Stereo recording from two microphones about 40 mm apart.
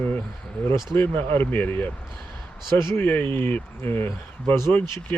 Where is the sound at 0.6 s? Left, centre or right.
Left.